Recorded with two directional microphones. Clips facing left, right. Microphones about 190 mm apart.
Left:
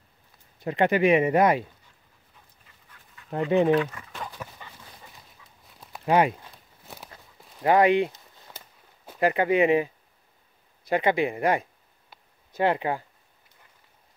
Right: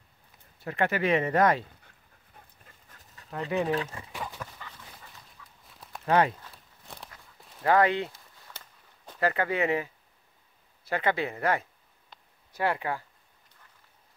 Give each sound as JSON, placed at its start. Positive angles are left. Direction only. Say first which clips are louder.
{"t": 0.6, "sound": "speech", "louder": "left 6 dB", "side_deg": 15}
{"t": 2.6, "sound": "dog", "louder": "right 1 dB", "side_deg": -45}
{"t": 3.3, "sound": "speech", "louder": "left 7 dB", "side_deg": 35}
{"t": 3.8, "sound": "speech", "louder": "left 5 dB", "side_deg": -25}
{"t": 4.1, "sound": "a sound", "louder": "even", "side_deg": -5}
{"t": 4.4, "sound": "dog", "louder": "left 1 dB", "side_deg": 20}
{"t": 5.4, "sound": "a sound", "louder": "right 1 dB", "side_deg": 15}
{"t": 6.0, "sound": "speech", "louder": "left 3 dB", "side_deg": 15}
{"t": 6.9, "sound": "walk", "louder": "left 2 dB", "side_deg": 5}
{"t": 7.6, "sound": "a sound", "louder": "left 4 dB", "side_deg": 15}
{"t": 10.8, "sound": "speech", "louder": "left 5 dB", "side_deg": 15}